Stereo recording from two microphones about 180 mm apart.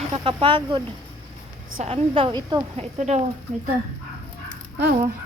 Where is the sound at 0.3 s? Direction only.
25° right (ahead or behind).